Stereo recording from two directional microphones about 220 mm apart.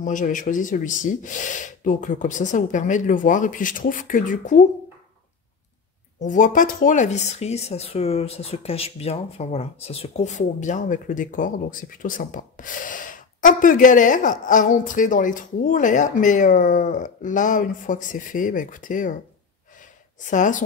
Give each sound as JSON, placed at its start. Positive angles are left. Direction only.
{"t": 0.0, "sound": "speech", "side_deg": 35}
{"t": 6.1, "sound": "speech", "side_deg": 35}
{"t": 20.2, "sound": "speech", "side_deg": 35}